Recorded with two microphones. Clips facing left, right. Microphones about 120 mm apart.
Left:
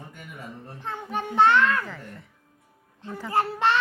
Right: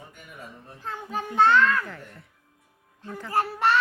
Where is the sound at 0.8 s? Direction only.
20° left (ahead or behind).